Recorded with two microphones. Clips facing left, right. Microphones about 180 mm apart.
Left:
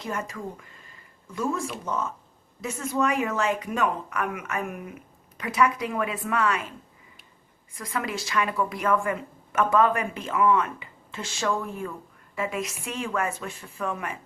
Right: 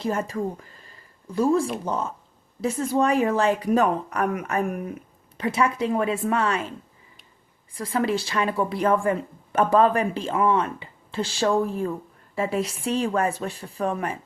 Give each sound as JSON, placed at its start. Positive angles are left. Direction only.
{"t": 0.0, "sound": "a woman's voice", "side_deg": -30}
{"t": 7.8, "sound": "speech", "side_deg": -30}